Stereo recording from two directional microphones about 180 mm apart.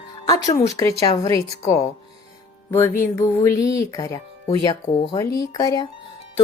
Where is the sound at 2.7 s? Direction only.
15° left (ahead or behind).